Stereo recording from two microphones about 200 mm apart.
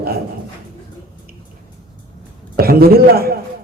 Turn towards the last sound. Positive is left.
turn(degrees=-50)  # may be behind; listen again after turning